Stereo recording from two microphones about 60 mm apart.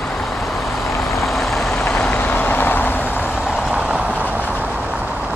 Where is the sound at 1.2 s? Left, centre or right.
Centre.